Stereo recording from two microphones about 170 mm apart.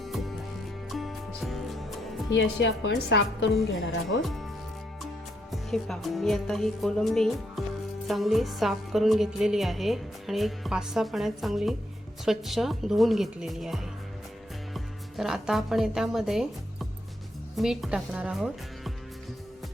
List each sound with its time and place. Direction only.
0.0 s music: centre (ahead or behind)
2.3 s a woman's voice: 90° left
4.2 s music: centre (ahead or behind)
5.5 s music: centre (ahead or behind)
14.7 s speech: centre (ahead or behind)
17.6 s music: centre (ahead or behind)